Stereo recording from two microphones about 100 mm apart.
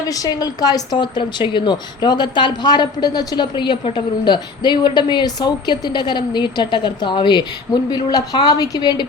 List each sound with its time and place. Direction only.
0.1 s a woman's voice: 40° left (ahead or behind)